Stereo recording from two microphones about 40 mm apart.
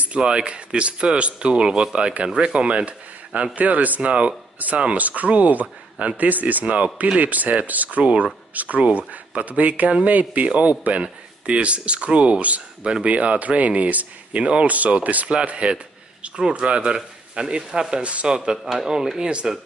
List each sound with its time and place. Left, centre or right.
0.2 s speech: right
3.5 s speech: right
4.1 s speech: right
4.6 s speech: right
8.0 s speech: right
18.0 s speech: right
18.3 s speech: right
18.6 s speech: centre
18.9 s speech: centre